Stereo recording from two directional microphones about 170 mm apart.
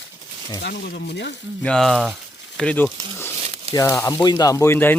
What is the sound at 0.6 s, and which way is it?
Speech, 70° left (ahead or behind).